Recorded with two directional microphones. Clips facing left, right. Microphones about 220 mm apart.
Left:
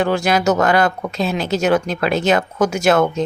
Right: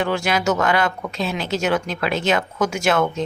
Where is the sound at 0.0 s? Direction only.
40° left (ahead or behind).